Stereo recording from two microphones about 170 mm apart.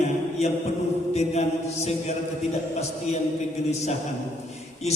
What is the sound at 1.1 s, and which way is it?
Mantra, 40° left (ahead or behind).